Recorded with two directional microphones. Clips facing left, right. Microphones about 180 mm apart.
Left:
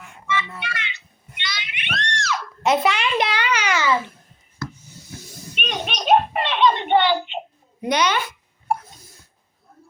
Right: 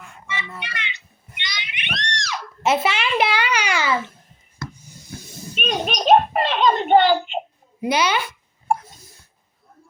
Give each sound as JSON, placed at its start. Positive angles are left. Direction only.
{"t": 0.6, "sound": "speech", "side_deg": -20}
{"t": 1.4, "sound": "screaming", "side_deg": -15}
{"t": 2.6, "sound": "a child's voice", "side_deg": -5}
{"t": 3.5, "sound": "babbling", "side_deg": -10}
{"t": 5.5, "sound": "a sound", "side_deg": -40}
{"t": 7.8, "sound": "a woman's voice", "side_deg": -5}